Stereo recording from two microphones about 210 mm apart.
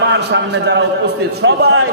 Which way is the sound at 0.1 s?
55° right (ahead or behind).